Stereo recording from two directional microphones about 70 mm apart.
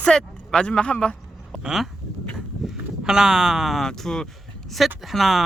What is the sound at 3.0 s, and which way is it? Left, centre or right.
Speech, centre.